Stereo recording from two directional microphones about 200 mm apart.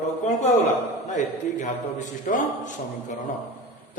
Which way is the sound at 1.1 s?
40° left (ahead or behind).